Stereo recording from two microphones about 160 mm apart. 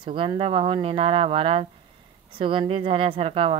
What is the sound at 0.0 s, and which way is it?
A woman's voice, 35° right (ahead or behind).